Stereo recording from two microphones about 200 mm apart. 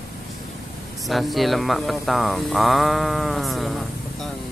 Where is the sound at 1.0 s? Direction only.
Centre (ahead or behind).